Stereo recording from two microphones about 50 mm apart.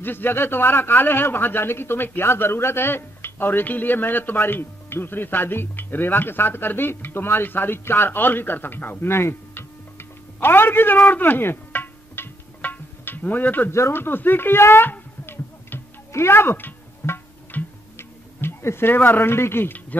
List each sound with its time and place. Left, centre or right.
0.0 s speech: left
9.0 s tick-tock: left
11.1 s music: left
13.7 s speech: left
14.0 s a sound: left
16.1 s music: left
17.5 s tick-tock: left
17.9 s tick-tock: left
18.9 s speech: left